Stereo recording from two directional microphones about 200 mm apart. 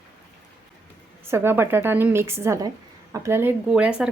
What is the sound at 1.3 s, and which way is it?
A woman's voice, 10° right (ahead or behind).